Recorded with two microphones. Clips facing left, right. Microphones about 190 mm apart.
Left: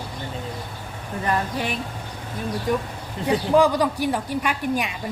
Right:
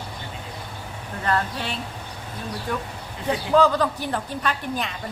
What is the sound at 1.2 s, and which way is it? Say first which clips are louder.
A woman's voice: left 1 dB; 15° left (ahead or behind).